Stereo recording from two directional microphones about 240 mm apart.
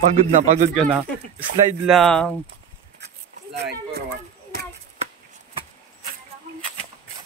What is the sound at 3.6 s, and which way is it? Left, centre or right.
Speech, right.